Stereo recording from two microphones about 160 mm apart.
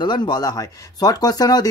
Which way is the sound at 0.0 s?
25° left (ahead or behind).